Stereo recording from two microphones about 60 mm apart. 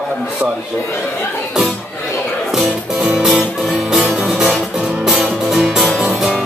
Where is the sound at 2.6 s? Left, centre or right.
Centre.